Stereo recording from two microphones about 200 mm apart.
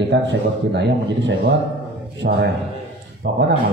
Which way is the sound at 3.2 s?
50° right (ahead or behind).